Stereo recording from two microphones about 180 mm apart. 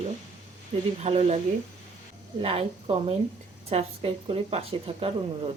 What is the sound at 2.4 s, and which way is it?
Speech, 30° right (ahead or behind).